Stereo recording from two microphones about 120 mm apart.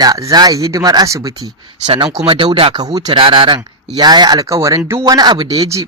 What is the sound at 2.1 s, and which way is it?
Speech, 50° right (ahead or behind).